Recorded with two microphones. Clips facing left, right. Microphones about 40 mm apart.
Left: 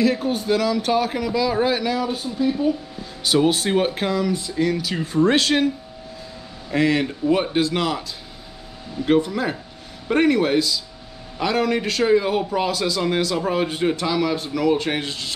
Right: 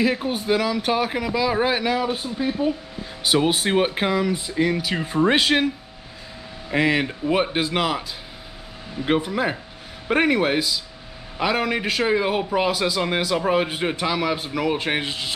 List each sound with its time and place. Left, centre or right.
0.0 s speech: centre
6.7 s speech: centre
9.0 s speech: centre